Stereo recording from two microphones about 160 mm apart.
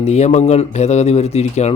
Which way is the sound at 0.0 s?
40° left (ahead or behind).